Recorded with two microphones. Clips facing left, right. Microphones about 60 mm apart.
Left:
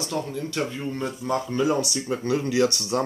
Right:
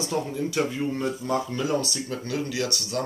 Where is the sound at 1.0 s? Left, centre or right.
Centre.